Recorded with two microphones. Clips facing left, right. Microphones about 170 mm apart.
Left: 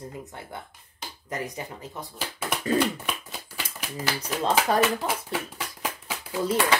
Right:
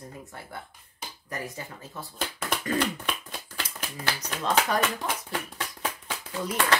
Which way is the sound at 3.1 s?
10° left (ahead or behind).